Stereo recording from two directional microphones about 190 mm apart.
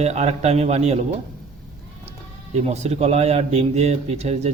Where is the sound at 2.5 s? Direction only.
35° right (ahead or behind).